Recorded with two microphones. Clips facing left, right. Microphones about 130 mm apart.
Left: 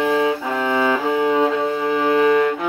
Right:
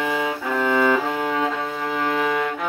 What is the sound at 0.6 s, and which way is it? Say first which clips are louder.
Music: left 1 dB; 15° left (ahead or behind).